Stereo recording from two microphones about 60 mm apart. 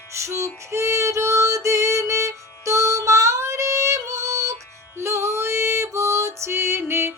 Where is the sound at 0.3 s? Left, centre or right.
Right.